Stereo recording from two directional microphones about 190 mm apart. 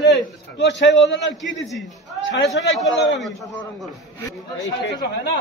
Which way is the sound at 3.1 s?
Centre (ahead or behind).